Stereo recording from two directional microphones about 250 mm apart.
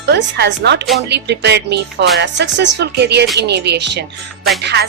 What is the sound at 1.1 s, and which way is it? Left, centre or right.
Speech, right.